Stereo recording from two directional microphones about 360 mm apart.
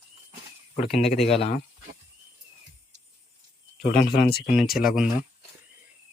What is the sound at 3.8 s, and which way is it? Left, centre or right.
Speech, left.